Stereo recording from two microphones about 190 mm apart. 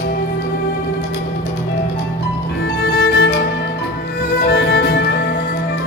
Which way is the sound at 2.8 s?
65° left (ahead or behind).